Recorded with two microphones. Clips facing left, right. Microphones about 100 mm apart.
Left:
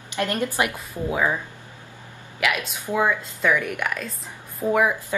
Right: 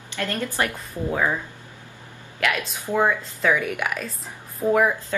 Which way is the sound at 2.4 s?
5° left (ahead or behind).